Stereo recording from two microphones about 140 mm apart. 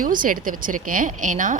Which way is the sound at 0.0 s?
80° right.